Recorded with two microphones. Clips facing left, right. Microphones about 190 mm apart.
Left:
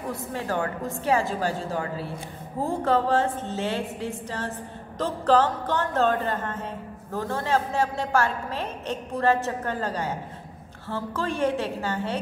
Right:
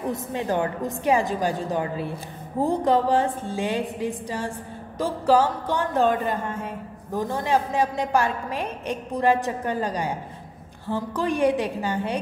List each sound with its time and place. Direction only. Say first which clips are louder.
0.1 s a woman's voice: right 2 dB; 20° right (ahead or behind)